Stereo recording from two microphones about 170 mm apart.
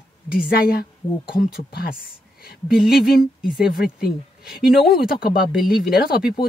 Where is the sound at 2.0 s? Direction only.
65° left (ahead or behind).